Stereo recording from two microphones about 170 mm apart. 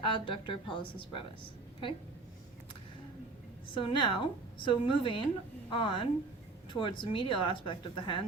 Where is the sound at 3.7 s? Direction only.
30° left (ahead or behind).